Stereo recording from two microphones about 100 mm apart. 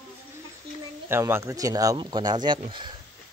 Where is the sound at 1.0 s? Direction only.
25° right (ahead or behind); by 2.6 s 45° right (ahead or behind).